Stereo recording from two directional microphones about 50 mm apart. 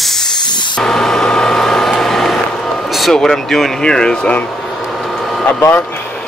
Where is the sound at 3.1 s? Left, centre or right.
Centre.